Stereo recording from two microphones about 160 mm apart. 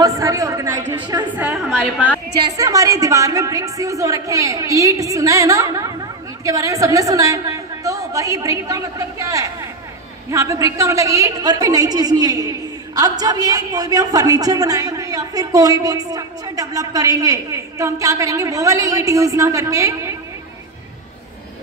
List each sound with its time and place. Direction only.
0.0 s a sound: 20° right (ahead or behind)
0.9 s a woman's voice: 25° right (ahead or behind)
1.3 s a woman's voice: 10° right (ahead or behind)
2.5 s a woman's voice: 20° right (ahead or behind)